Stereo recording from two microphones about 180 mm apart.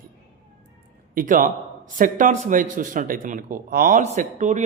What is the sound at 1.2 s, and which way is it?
A man's voice, 50° right (ahead or behind).